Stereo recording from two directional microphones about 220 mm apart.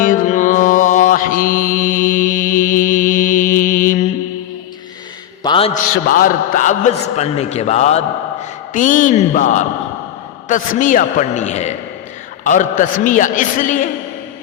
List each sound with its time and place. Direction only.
0.0 s mantra: 35° left (ahead or behind)
5.4 s a sound: 25° left (ahead or behind)
6.1 s a man's voice: 40° left (ahead or behind)